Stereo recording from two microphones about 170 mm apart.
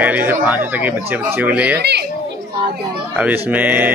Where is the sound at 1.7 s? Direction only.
75° right (ahead or behind).